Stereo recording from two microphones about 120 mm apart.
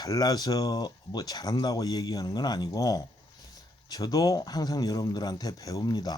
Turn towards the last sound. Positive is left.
turn(degrees=35)  # may be behind; listen again after turning